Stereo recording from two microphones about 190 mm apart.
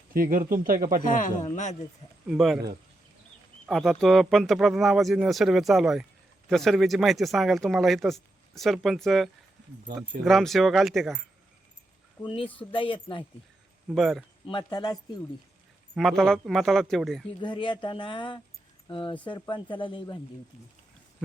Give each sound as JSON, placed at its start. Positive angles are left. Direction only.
{"t": 0.1, "sound": "speech", "side_deg": -50}
{"t": 1.0, "sound": "a man's voice", "side_deg": 45}
{"t": 2.2, "sound": "speech", "side_deg": 0}
{"t": 3.7, "sound": "speech", "side_deg": 0}
{"t": 12.2, "sound": "speech", "side_deg": 25}
{"t": 13.9, "sound": "speech", "side_deg": 0}
{"t": 14.4, "sound": "speech", "side_deg": 25}
{"t": 16.0, "sound": "speech", "side_deg": 0}
{"t": 17.4, "sound": "speech", "side_deg": 25}